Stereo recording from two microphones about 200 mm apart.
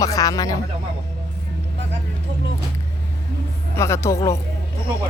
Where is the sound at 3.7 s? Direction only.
15° left (ahead or behind).